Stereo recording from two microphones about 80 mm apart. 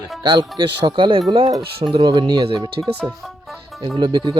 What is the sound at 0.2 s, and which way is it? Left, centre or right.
Speech, right.